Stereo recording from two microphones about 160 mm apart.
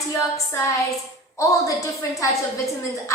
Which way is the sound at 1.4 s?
20° left (ahead or behind).